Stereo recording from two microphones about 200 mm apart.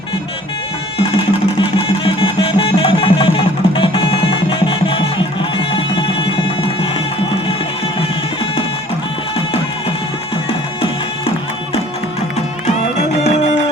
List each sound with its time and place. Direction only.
0.9 s music: 25° left (ahead or behind)
13.0 s music: 35° left (ahead or behind)